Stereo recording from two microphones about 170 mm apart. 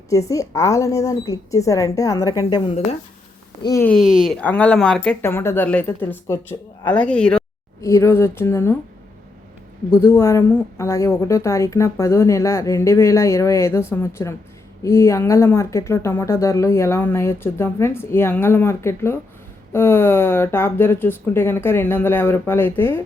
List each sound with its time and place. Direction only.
0.1 s speech: 20° left (ahead or behind)
3.8 s a woman's voice: centre (ahead or behind)
7.8 s a woman's voice: 15° left (ahead or behind)
9.9 s a woman's voice: 15° left (ahead or behind)